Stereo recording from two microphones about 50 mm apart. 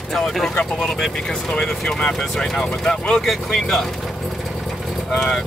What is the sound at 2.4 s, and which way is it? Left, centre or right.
Speech, centre.